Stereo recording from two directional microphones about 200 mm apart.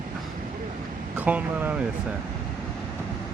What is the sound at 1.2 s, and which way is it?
Speech, 10° right (ahead or behind).